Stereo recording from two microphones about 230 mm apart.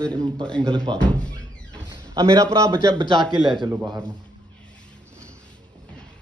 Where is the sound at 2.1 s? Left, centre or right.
Centre.